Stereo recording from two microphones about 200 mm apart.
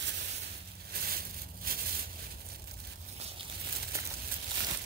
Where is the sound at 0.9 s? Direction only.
45° right (ahead or behind).